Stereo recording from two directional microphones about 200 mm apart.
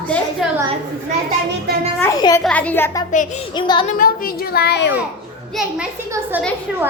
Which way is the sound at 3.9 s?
45° left (ahead or behind).